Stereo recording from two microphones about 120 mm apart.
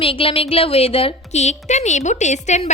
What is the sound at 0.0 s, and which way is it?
A woman's voice, 50° left (ahead or behind).